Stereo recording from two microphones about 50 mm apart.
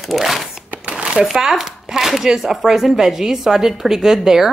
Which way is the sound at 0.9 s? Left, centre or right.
Right.